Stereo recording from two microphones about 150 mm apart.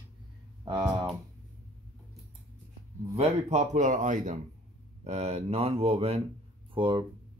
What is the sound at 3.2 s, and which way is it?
Speech, 45° right (ahead or behind).